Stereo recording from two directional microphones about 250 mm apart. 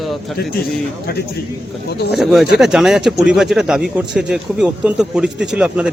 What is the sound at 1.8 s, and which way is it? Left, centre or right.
Speech, left.